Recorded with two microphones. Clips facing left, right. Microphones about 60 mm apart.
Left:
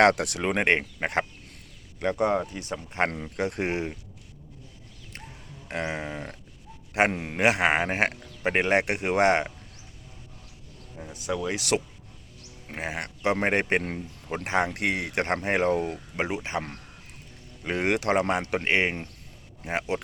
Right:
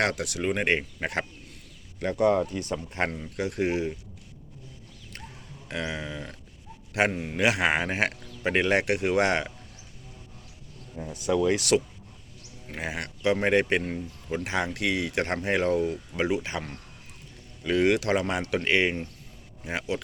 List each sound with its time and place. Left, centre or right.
0.0 s speech: left
2.0 s speech: left
2.5 s speech: centre
3.2 s speech: left
5.6 s speech: left
7.1 s speech: left
7.4 s speech: left
10.9 s speech: centre
12.6 s speech: left
16.2 s speech: left